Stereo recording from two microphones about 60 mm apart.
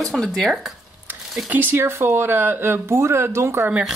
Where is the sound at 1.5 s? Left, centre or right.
Right.